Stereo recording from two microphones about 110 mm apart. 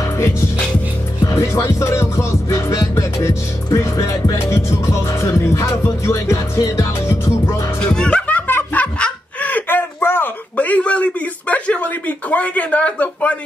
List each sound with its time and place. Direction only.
1.2 s music: 25° left (ahead or behind)
7.8 s music: 10° left (ahead or behind)
9.0 s a sound: 15° left (ahead or behind)